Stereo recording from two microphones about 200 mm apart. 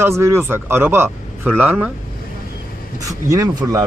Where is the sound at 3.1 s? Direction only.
15° right (ahead or behind).